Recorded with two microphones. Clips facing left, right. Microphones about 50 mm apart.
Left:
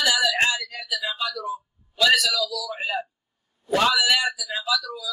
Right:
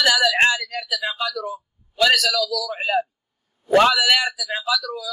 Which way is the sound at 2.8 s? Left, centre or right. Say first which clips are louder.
Right 6 dB; right.